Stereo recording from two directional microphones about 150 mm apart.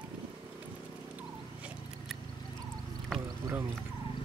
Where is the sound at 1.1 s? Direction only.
10° right (ahead or behind).